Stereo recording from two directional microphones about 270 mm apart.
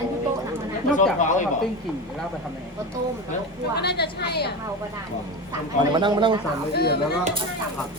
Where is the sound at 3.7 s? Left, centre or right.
Left.